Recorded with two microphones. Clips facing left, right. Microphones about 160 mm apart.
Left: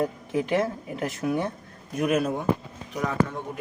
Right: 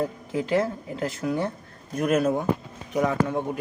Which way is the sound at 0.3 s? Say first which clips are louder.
Right 2 dB; 20° left (ahead or behind).